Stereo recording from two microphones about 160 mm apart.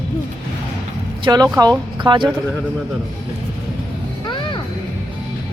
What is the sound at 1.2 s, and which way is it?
Speech, 25° right (ahead or behind).